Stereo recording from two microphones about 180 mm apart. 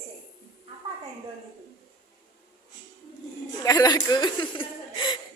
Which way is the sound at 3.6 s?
20° left (ahead or behind).